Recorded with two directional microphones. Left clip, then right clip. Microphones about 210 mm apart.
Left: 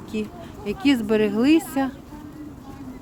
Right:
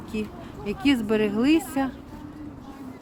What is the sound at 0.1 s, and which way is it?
Speech, 10° left (ahead or behind).